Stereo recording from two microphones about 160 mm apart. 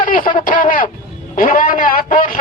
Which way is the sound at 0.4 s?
60° left (ahead or behind).